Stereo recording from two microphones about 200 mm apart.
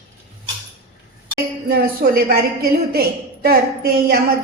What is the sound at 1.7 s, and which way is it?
A woman's voice, 50° right (ahead or behind).